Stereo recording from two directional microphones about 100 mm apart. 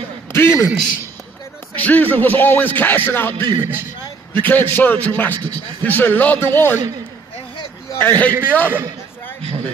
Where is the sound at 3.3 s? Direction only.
55° right (ahead or behind).